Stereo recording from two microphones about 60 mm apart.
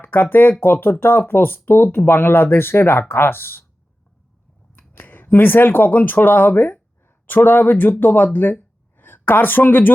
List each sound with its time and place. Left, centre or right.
0.0 s speech: left
4.7 s a woman's voice: left